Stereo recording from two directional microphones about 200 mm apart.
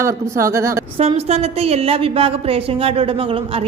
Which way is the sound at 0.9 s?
30° right (ahead or behind).